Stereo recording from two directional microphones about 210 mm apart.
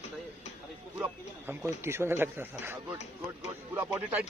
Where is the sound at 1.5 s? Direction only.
10° right (ahead or behind).